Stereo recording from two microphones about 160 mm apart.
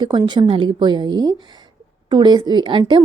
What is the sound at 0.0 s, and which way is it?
A woman's voice, 30° right (ahead or behind).